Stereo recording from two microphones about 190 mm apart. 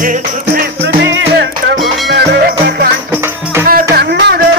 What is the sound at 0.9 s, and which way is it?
Music, 75° right (ahead or behind).